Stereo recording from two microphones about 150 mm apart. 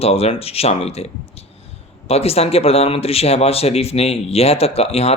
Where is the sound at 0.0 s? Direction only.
40° left (ahead or behind).